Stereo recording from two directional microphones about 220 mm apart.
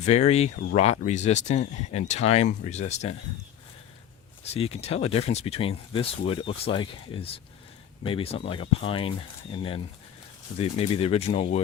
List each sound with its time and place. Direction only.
0.0 s speech: 30° left (ahead or behind)
4.5 s speech: 25° left (ahead or behind)